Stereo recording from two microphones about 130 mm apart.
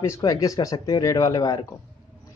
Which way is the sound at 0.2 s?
25° left (ahead or behind).